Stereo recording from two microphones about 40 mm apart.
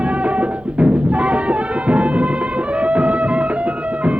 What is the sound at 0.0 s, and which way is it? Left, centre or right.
Music, right.